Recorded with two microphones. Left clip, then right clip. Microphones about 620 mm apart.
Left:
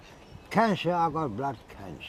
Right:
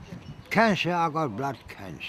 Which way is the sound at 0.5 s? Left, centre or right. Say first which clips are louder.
Right 2 dB; centre.